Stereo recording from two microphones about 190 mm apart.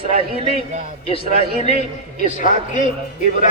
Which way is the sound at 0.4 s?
35° right (ahead or behind).